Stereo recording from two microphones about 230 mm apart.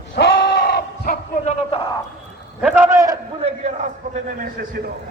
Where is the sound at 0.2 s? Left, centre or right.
Left.